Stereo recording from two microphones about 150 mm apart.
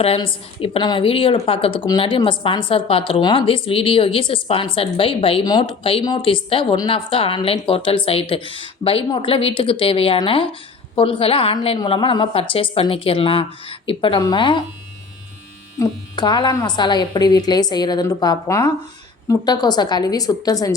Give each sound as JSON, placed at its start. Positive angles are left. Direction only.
{"t": 0.2, "sound": "a woman's voice", "side_deg": 35}
{"t": 15.8, "sound": "speech", "side_deg": 30}